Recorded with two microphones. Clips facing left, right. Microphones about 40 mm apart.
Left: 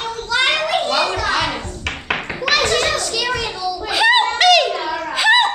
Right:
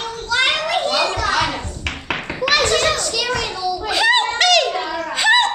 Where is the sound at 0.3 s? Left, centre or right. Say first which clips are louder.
Left 1 dB; centre.